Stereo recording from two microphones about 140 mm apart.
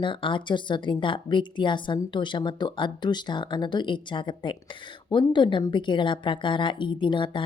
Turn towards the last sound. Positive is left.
turn(degrees=35)  # may be behind; listen again after turning